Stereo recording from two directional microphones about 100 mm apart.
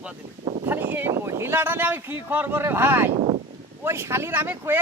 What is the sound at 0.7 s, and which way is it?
Speech, 20° right (ahead or behind).